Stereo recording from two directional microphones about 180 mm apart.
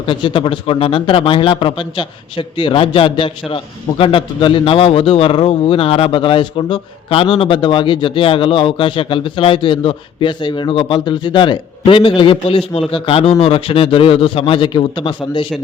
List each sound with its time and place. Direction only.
0.0 s speech: 30° left (ahead or behind)